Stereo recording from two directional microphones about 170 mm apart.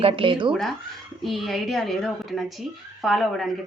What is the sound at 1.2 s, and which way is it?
A woman's voice, centre (ahead or behind).